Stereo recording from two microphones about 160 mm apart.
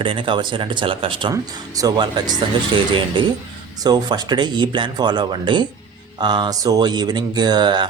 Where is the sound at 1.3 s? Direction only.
20° right (ahead or behind).